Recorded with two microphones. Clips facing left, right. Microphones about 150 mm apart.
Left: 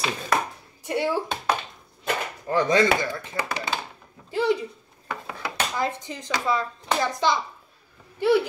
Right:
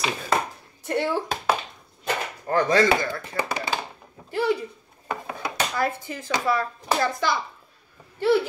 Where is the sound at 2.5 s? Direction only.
20° left (ahead or behind).